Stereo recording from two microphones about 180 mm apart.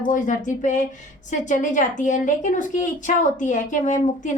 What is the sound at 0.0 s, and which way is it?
Speech, 45° left (ahead or behind).